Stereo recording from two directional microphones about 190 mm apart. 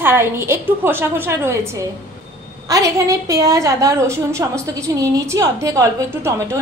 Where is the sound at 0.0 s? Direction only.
10° right (ahead or behind).